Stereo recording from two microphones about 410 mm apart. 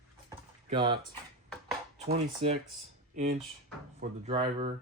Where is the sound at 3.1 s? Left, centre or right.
Right.